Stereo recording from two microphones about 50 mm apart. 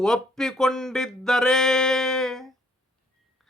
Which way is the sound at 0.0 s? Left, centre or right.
Centre.